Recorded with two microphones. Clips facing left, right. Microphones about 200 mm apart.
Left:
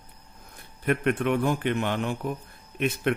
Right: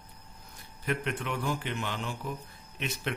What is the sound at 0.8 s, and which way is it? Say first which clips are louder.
A man's voice: left 8 dB; 55° left (ahead or behind).